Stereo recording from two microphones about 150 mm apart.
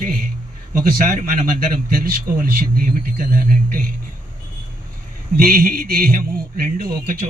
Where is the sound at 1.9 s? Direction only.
75° right (ahead or behind).